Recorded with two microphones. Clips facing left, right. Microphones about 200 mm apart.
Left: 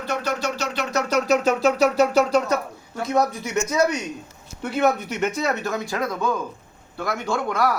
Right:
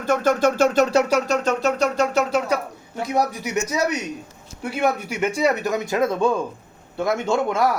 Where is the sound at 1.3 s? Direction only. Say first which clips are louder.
Left 2 dB; 5° left (ahead or behind).